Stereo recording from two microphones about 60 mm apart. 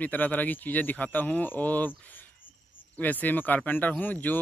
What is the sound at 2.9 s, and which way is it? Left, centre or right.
Speech, left.